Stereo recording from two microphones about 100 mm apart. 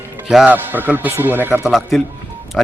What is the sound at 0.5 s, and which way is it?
A man's voice, 20° right (ahead or behind).